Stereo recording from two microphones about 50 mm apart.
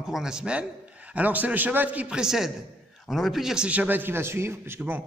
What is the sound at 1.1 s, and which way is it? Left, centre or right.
Speech, right.